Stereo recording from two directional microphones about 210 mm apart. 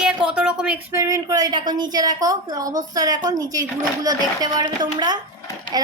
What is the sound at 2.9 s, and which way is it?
A woman's voice, 20° right (ahead or behind).